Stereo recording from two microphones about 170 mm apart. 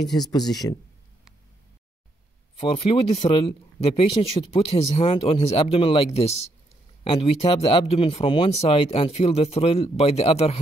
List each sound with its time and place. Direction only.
0.3 s speech: 25° left (ahead or behind)
2.6 s speech: 35° left (ahead or behind)